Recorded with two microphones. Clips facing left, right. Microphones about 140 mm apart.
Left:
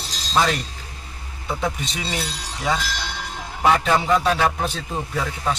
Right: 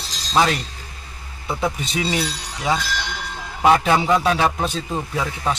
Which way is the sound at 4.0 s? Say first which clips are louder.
Right 1 dB; 5° right (ahead or behind).